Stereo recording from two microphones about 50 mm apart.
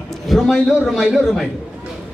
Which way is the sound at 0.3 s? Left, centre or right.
Centre.